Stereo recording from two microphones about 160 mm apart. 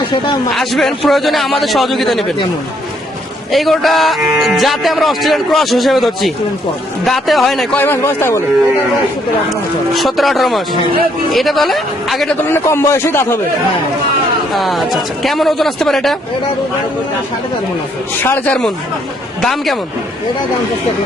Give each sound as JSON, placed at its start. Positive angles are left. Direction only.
{"t": 0.5, "sound": "speech", "side_deg": 0}
{"t": 3.5, "sound": "speech", "side_deg": 0}
{"t": 9.5, "sound": "speech", "side_deg": 0}
{"t": 12.5, "sound": "a man's voice", "side_deg": 15}
{"t": 14.5, "sound": "speech", "side_deg": 0}
{"t": 18.2, "sound": "a man's voice", "side_deg": 10}